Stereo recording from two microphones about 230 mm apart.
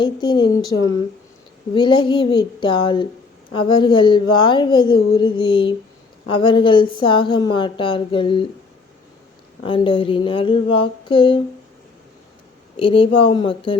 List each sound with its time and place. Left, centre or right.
0.0 s speech: centre
9.6 s speech: left
12.7 s speech: left